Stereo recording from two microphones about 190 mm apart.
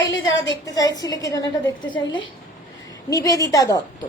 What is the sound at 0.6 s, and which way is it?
Speech, 20° left (ahead or behind).